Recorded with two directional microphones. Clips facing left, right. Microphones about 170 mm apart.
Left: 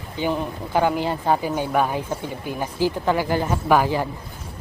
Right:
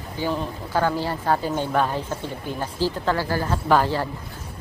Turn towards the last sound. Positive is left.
turn(degrees=15)  # may be behind; listen again after turning